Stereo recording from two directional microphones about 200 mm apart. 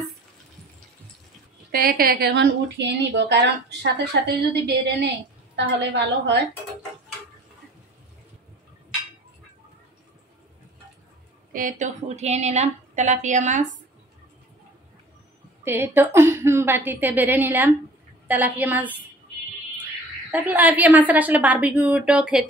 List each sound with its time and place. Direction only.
1.7 s a woman's voice: 45° right (ahead or behind)
11.5 s a woman's voice: 40° right (ahead or behind)
15.6 s a woman's voice: 10° right (ahead or behind)
20.2 s a woman's voice: 10° right (ahead or behind)